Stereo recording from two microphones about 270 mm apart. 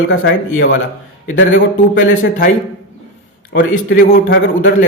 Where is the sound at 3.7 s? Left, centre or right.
Left.